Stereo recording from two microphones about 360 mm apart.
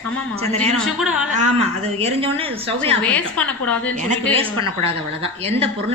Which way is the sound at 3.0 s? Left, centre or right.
Centre.